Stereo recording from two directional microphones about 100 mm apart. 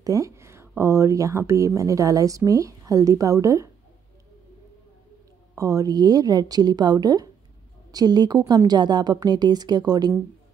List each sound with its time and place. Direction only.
0.0 s a woman's voice: 35° right (ahead or behind)
5.6 s a woman's voice: 35° right (ahead or behind)